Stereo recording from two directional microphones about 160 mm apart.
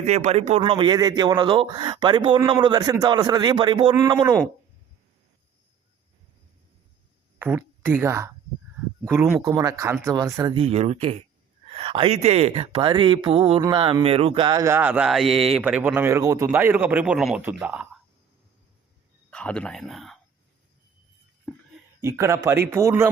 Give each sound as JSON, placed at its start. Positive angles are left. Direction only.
{"t": 0.0, "sound": "speech", "side_deg": -45}
{"t": 0.6, "sound": "speech", "side_deg": -30}
{"t": 7.3, "sound": "a woman's voice", "side_deg": -15}
{"t": 10.5, "sound": "a man's voice", "side_deg": -40}
{"t": 19.3, "sound": "speech", "side_deg": 5}
{"t": 21.5, "sound": "a sound", "side_deg": 10}
{"t": 22.0, "sound": "a man's voice", "side_deg": -20}